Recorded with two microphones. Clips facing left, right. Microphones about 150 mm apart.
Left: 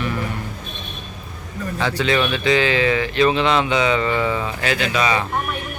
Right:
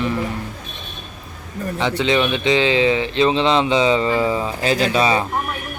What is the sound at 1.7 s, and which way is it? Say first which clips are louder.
Speech: right 1 dB; 20° right (ahead or behind).